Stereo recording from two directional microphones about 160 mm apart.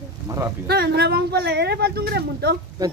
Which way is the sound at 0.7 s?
85° right.